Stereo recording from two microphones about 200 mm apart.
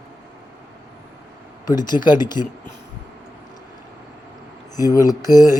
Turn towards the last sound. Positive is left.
turn(degrees=20)  # may be behind; listen again after turning